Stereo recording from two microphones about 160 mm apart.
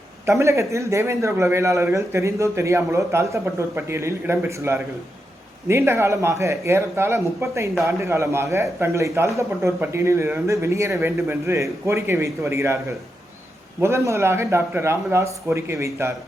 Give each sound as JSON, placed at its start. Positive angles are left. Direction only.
{"t": 0.3, "sound": "a man's voice", "side_deg": -15}
{"t": 13.8, "sound": "a man's voice", "side_deg": -15}